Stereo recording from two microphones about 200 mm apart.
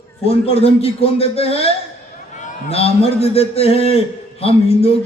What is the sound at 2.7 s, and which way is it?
Speech, 30° left (ahead or behind).